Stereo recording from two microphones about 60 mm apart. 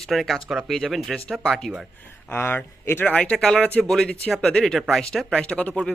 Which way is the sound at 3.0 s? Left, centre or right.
Left.